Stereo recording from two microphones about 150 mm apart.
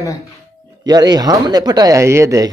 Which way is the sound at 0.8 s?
25° right (ahead or behind).